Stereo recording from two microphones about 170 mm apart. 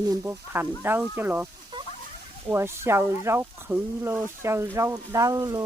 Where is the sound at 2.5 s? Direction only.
15° right (ahead or behind).